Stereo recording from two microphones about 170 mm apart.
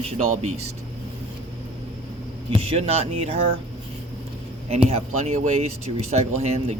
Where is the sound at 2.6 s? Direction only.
35° right (ahead or behind).